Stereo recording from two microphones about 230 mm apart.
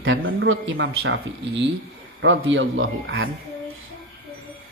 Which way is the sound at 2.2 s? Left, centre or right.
Right.